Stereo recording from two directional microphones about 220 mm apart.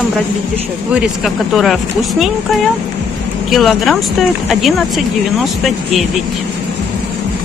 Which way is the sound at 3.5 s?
Centre (ahead or behind).